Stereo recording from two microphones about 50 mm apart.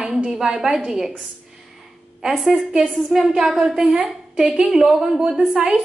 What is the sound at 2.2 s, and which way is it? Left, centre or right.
A woman's voice, centre.